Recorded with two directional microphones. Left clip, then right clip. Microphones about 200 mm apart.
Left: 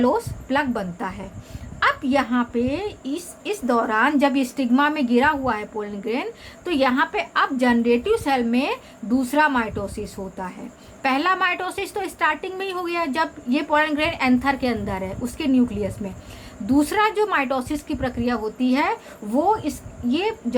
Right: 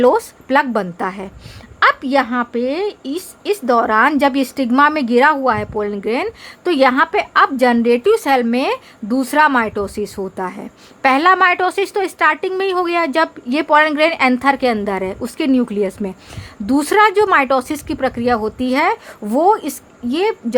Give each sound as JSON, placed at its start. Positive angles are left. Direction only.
{"t": 0.0, "sound": "a woman's voice", "side_deg": -50}